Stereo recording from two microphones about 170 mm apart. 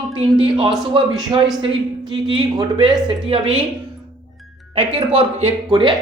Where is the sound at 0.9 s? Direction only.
30° right (ahead or behind).